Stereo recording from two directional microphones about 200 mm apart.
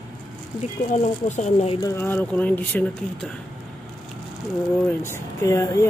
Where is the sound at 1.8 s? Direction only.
15° left (ahead or behind).